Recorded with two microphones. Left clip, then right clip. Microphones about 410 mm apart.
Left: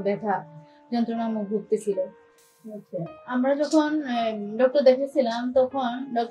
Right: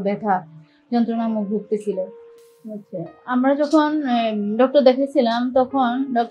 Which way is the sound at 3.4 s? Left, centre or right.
Right.